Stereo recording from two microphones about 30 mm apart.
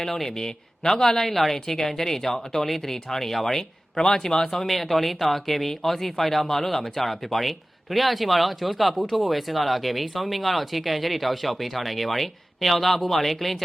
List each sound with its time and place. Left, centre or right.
0.0 s speech: centre
0.3 s a man's voice: left
3.9 s a man's voice: centre
4.6 s speech: centre